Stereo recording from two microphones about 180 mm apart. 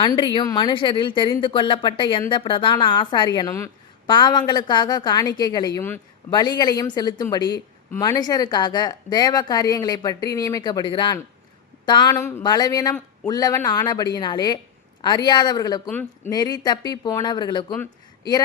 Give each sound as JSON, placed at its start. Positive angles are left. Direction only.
{"t": 0.0, "sound": "speech", "side_deg": 25}